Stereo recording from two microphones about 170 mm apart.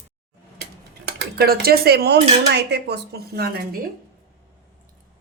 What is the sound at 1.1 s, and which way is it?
Speech, 75° right (ahead or behind).